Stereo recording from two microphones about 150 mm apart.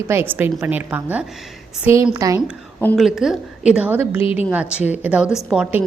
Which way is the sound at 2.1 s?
25° right (ahead or behind).